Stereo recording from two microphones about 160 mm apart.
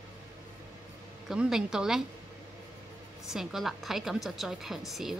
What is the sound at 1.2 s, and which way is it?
Speech, 5° right (ahead or behind).